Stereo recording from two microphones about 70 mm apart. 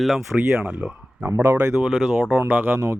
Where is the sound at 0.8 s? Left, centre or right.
Centre.